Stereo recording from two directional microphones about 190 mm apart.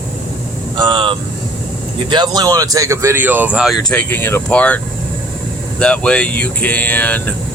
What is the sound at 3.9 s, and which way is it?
Speech, 10° left (ahead or behind).